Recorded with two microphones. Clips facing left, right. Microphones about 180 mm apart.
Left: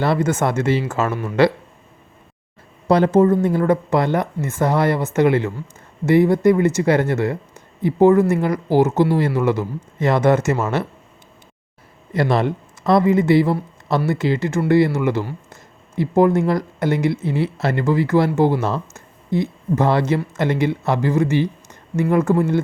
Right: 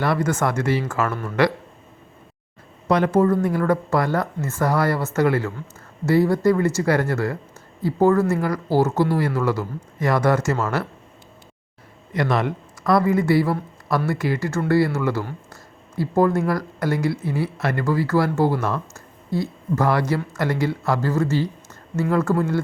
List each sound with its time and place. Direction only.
0.0 s speech: 25° left (ahead or behind)
1.1 s speech: 10° left (ahead or behind)
2.8 s speech: 30° left (ahead or behind)
12.1 s speech: 30° left (ahead or behind)